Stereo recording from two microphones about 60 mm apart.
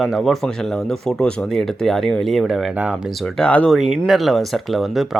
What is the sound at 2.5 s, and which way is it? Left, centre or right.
Speech, centre.